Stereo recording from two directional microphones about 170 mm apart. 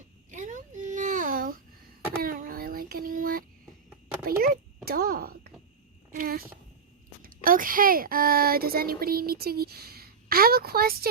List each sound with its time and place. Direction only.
0.3 s babbling: 50° right (ahead or behind)
2.2 s child singing: 55° right (ahead or behind)
4.3 s a sound: 60° right (ahead or behind)
7.2 s speech: 55° right (ahead or behind)